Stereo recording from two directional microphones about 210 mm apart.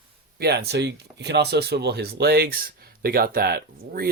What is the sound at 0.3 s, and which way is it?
Speech, 50° right (ahead or behind).